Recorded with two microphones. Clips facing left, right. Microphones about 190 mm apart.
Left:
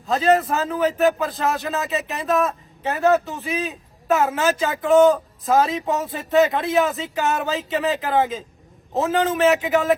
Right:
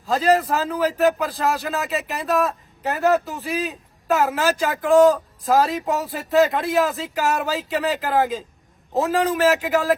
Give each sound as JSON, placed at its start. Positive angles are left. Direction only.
{"t": 0.0, "sound": "a man's voice", "side_deg": 0}